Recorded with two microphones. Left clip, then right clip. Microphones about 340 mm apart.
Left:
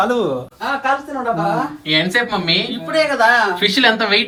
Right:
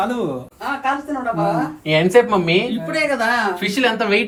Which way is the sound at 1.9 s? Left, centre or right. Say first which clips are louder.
Right 3 dB; centre.